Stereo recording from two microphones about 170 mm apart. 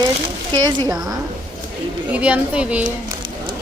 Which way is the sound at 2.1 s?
5° right (ahead or behind).